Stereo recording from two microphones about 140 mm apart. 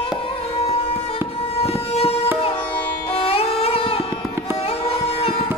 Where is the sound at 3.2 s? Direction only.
45° left (ahead or behind).